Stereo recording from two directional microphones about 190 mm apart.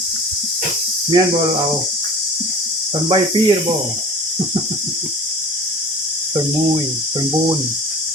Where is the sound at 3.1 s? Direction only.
25° right (ahead or behind).